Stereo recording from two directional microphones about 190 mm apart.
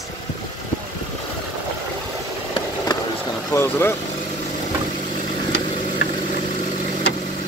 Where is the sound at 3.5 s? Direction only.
10° left (ahead or behind).